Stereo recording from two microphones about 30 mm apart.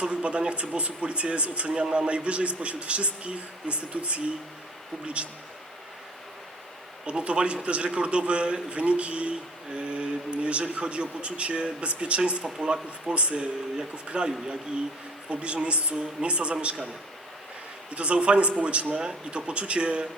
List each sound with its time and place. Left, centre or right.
0.0 s a man's voice: right
7.0 s a man's voice: right
9.7 s a man's voice: right
12.5 s speech: right
13.1 s a man's voice: right
15.3 s a man's voice: right
17.9 s a man's voice: right